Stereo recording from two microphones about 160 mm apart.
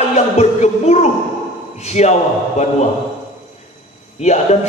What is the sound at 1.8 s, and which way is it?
Speech, 45° left (ahead or behind).